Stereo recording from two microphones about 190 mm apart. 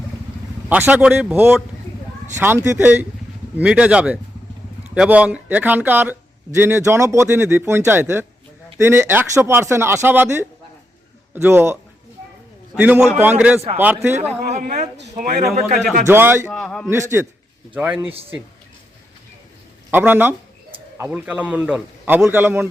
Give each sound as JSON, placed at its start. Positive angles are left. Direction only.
{"t": 0.7, "sound": "speech", "side_deg": -10}
{"t": 2.6, "sound": "speech", "side_deg": -10}
{"t": 14.5, "sound": "a man's voice", "side_deg": -35}
{"t": 16.0, "sound": "speech", "side_deg": -10}
{"t": 16.5, "sound": "a man's voice", "side_deg": 0}
{"t": 16.9, "sound": "speech", "side_deg": -15}
{"t": 19.9, "sound": "bird", "side_deg": -10}
{"t": 21.0, "sound": "speech", "side_deg": -10}